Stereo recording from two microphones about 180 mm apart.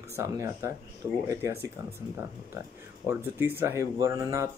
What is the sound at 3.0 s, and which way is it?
Speech, 10° right (ahead or behind).